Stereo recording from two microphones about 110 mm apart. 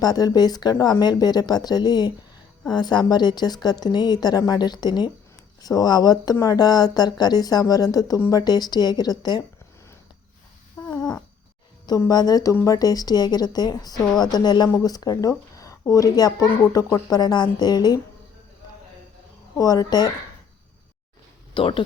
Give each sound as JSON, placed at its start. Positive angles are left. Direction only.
{"t": 0.0, "sound": "a woman's voice", "side_deg": 35}
{"t": 10.9, "sound": "cat", "side_deg": 40}
{"t": 11.9, "sound": "a woman's voice", "side_deg": 35}
{"t": 19.5, "sound": "a woman's voice", "side_deg": 35}
{"t": 21.5, "sound": "speech", "side_deg": 55}